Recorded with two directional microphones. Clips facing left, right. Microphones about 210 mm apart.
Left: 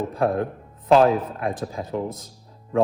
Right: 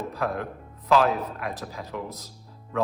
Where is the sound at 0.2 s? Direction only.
30° left (ahead or behind).